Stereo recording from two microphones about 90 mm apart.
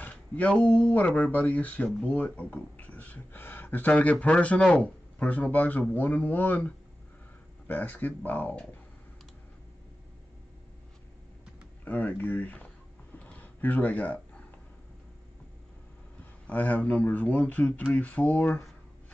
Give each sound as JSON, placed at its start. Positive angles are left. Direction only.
{"t": 0.0, "sound": "speech", "side_deg": 15}
{"t": 11.8, "sound": "speech", "side_deg": 20}
{"t": 13.2, "sound": "a sound", "side_deg": 20}
{"t": 16.4, "sound": "speech", "side_deg": 15}